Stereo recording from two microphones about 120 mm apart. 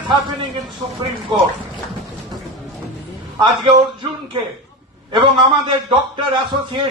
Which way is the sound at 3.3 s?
45° right (ahead or behind).